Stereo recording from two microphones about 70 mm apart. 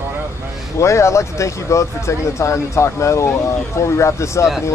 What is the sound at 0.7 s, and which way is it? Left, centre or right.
Speech, left.